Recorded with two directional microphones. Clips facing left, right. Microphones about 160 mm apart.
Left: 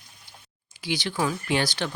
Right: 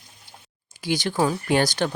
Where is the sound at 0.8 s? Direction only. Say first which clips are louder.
Right 5 dB; 45° right (ahead or behind).